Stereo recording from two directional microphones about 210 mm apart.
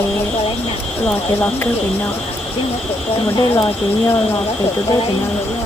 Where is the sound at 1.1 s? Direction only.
5° left (ahead or behind).